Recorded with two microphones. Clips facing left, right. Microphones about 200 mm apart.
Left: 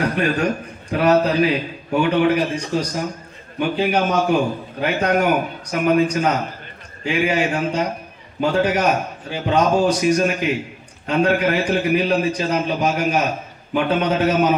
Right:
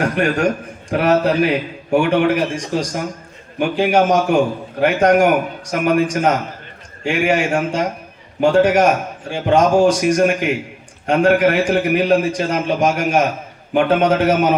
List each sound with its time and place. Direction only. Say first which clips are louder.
0.0 s a man's voice: right 3 dB; 50° right (ahead or behind)